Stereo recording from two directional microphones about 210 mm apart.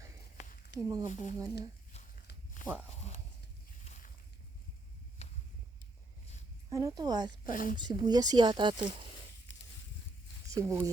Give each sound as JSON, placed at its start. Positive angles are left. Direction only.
{"t": 0.9, "sound": "speech", "side_deg": -15}
{"t": 3.9, "sound": "boat", "side_deg": 30}
{"t": 5.2, "sound": "a sound", "side_deg": 30}
{"t": 6.7, "sound": "speech", "side_deg": -15}
{"t": 7.5, "sound": "a woman's voice", "side_deg": 40}
{"t": 7.8, "sound": "speech", "side_deg": -20}
{"t": 10.5, "sound": "speech", "side_deg": -15}